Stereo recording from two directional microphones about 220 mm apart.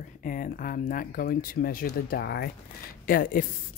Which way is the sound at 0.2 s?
40° left (ahead or behind).